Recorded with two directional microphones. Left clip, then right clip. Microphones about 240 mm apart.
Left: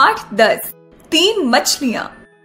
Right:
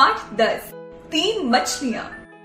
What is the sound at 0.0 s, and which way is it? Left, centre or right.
Music, left.